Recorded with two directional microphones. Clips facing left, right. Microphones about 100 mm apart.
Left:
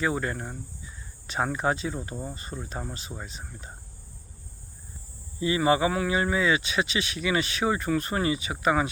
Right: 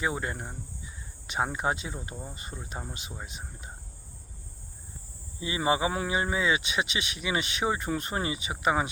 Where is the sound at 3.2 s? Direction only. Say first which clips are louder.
Left 2 dB; 15° right (ahead or behind).